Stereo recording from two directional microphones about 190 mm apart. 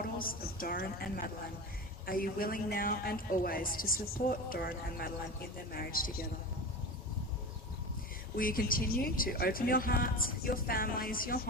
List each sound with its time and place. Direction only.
0.0 s a woman's voice: 50° left (ahead or behind)
8.4 s speech: 50° left (ahead or behind)